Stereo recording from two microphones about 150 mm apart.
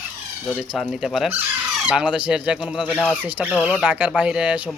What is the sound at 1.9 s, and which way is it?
Speech, 5° right (ahead or behind).